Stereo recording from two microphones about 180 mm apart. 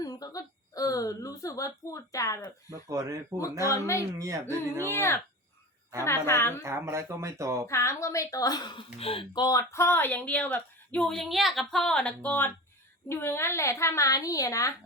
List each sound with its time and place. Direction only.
0.0 s a woman's voice: 20° left (ahead or behind)
2.6 s speech: 20° right (ahead or behind)
4.2 s speech: 15° right (ahead or behind)
4.9 s speech: 15° left (ahead or behind)
6.6 s speech: 15° right (ahead or behind)
7.7 s speech: 15° left (ahead or behind)